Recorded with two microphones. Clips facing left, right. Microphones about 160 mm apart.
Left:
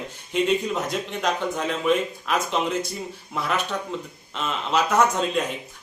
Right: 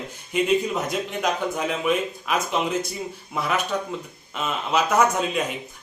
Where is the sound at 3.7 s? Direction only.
Centre (ahead or behind).